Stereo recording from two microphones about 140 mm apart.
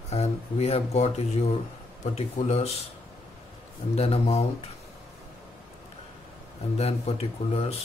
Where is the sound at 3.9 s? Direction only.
45° left (ahead or behind).